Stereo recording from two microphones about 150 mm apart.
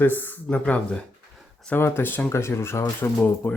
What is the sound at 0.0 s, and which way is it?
Speech, 15° left (ahead or behind).